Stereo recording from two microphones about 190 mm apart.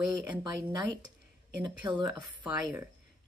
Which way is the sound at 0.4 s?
20° right (ahead or behind).